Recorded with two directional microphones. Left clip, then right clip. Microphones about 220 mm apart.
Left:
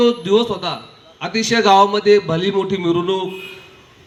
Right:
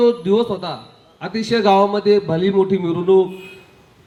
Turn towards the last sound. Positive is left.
turn(degrees=-55)  # may be behind; listen again after turning